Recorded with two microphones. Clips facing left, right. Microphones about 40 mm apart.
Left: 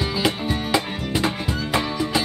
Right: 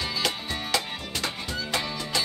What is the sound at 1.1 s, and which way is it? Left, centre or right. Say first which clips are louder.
Music: left 9 dB; left.